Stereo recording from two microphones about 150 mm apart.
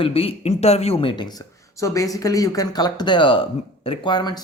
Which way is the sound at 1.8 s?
20° left (ahead or behind).